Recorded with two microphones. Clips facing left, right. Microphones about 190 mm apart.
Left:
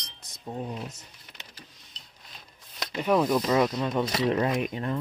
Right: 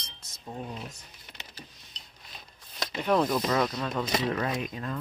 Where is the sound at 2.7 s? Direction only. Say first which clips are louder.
Left 1 dB; 10° left (ahead or behind).